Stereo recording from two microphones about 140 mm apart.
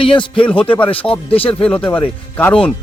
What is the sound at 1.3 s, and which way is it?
Speech, 40° left (ahead or behind).